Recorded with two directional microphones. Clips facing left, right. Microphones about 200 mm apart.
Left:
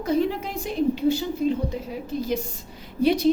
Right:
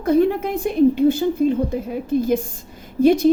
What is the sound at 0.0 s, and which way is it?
A woman's voice, 55° right (ahead or behind).